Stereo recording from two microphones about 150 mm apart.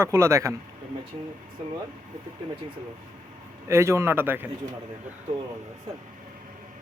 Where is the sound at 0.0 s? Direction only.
20° right (ahead or behind).